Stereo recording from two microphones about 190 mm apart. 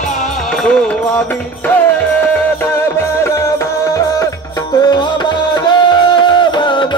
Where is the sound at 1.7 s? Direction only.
10° left (ahead or behind).